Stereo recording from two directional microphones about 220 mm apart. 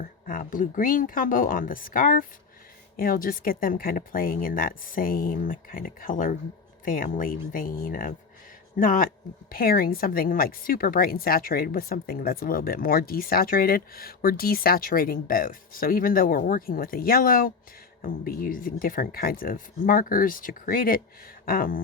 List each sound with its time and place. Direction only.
0.3 s speech: 40° left (ahead or behind)